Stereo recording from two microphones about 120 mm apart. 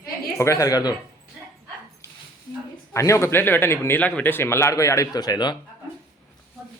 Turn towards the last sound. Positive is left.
turn(degrees=35)  # may be behind; listen again after turning